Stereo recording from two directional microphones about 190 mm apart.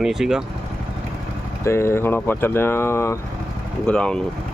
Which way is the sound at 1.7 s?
15° left (ahead or behind).